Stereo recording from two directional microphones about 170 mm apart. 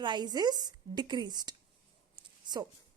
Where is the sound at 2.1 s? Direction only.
25° right (ahead or behind).